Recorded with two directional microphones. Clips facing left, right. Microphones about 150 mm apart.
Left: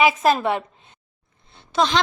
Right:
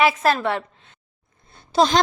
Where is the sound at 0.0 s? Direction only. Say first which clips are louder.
Left 1 dB; 15° left (ahead or behind).